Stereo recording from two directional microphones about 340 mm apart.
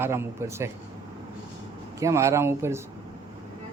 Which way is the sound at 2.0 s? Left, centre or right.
Centre.